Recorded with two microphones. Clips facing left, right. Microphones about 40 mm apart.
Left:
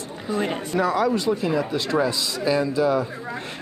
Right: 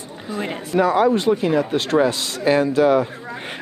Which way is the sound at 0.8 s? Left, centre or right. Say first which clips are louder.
Right 5 dB; right.